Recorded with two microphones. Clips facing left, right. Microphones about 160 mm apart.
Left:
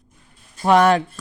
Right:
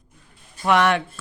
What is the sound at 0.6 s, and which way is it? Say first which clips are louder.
Speech: left 4 dB; 35° left (ahead or behind).